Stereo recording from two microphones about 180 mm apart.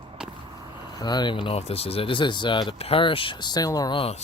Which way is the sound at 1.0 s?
25° left (ahead or behind).